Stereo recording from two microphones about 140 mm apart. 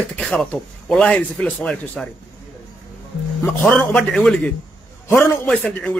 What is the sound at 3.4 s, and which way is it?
A man's voice, 15° left (ahead or behind).